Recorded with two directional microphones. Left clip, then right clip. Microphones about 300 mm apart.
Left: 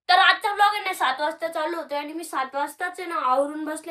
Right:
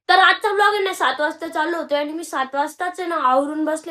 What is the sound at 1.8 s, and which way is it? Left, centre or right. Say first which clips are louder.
A woman's voice: right 7 dB; centre.